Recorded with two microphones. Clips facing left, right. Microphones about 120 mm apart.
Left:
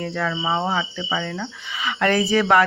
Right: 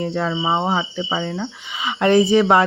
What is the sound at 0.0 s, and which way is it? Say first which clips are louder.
Speech: right 3 dB; 25° right (ahead or behind).